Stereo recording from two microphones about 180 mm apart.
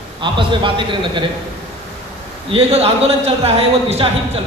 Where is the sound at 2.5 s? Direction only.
35° right (ahead or behind).